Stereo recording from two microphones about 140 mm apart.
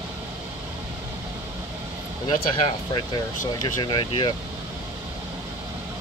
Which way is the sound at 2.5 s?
35° left (ahead or behind).